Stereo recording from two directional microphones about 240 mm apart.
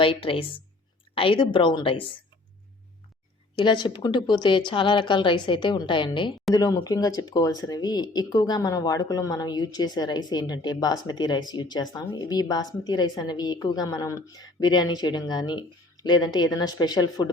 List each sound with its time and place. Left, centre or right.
0.0 s speech: left
3.5 s speech: centre